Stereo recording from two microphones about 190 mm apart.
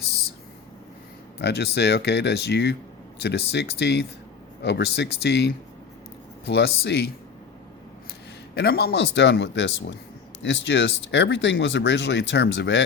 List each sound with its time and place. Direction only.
1.4 s speech: 60° left (ahead or behind)
8.5 s speech: 60° left (ahead or behind)